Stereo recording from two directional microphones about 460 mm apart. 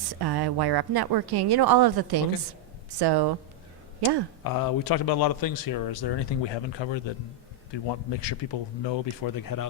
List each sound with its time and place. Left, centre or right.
0.2 s speech: right
4.4 s speech: left